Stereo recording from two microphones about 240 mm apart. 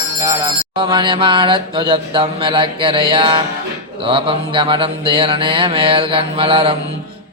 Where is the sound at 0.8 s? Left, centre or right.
Centre.